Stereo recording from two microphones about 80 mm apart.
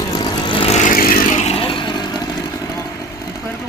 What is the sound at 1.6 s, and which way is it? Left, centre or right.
Vehicle, left.